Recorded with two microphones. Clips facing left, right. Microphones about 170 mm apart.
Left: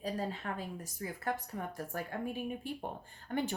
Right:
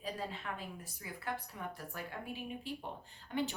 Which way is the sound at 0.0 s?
45° left (ahead or behind).